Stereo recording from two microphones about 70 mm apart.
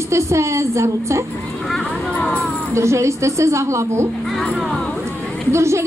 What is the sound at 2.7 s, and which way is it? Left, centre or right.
A woman's voice, right.